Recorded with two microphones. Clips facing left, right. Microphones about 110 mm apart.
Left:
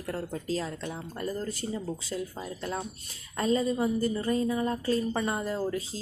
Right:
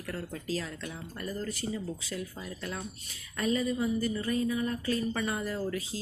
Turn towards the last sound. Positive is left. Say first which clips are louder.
# left 3 dB
turn(degrees=25)  # may be behind; listen again after turning